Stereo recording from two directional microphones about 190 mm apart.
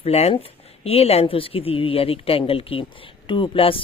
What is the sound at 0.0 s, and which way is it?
A woman's voice, 35° left (ahead or behind).